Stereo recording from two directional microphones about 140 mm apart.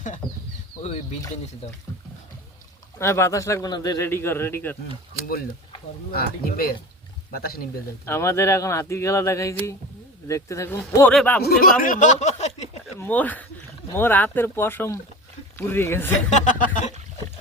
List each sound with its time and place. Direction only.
3.0 s a man's voice: 20° left (ahead or behind)
6.1 s speech: 90° left
8.0 s a man's voice: 20° left (ahead or behind)
11.1 s speech: 5° left (ahead or behind)
11.4 s speech: 90° left; by 12.6 s 55° left (ahead or behind)
13.0 s speech: 10° left (ahead or behind)
16.3 s speech: 65° left (ahead or behind)